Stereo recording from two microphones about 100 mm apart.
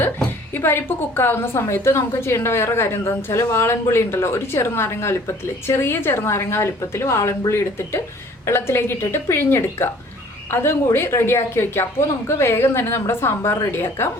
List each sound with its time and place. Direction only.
0.5 s a woman's voice: 20° left (ahead or behind)